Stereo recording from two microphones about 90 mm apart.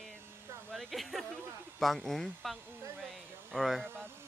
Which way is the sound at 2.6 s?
25° right (ahead or behind).